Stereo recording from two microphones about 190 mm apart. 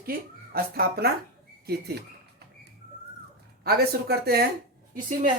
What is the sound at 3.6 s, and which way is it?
Speech, 55° right (ahead or behind).